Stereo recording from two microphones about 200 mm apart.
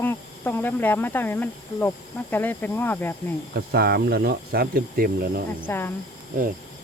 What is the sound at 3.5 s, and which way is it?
Speech, 55° right (ahead or behind).